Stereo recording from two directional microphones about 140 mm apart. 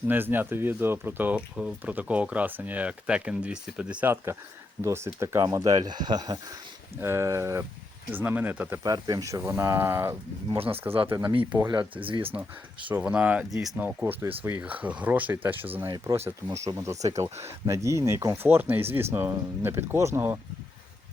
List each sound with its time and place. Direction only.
0.1 s speech: 15° right (ahead or behind); by 6.3 s 30° right (ahead or behind)
6.9 s speech: 20° right (ahead or behind)
8.8 s speech: 25° right (ahead or behind)
10.9 s speech: 35° right (ahead or behind)
12.9 s speech: 10° right (ahead or behind)